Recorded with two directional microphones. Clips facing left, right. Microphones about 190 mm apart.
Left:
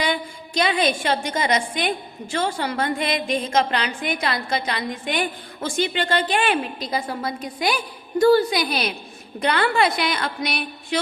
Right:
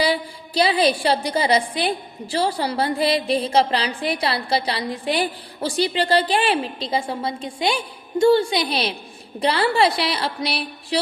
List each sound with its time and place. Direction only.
0.0 s a woman's voice: 35° right (ahead or behind)